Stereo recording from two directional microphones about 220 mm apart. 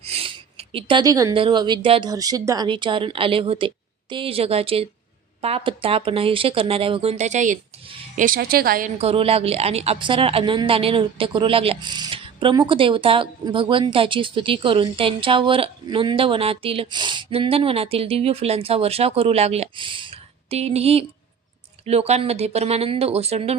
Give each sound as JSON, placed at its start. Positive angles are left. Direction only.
{"t": 0.0, "sound": "speech", "side_deg": -25}
{"t": 9.0, "sound": "speech", "side_deg": -25}